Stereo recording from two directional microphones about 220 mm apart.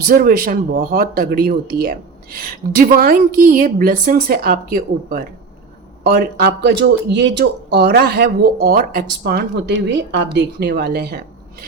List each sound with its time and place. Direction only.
0.0 s speech: 40° right (ahead or behind)